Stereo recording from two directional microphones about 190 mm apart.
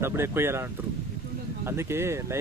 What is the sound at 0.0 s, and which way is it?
Speech, 10° right (ahead or behind).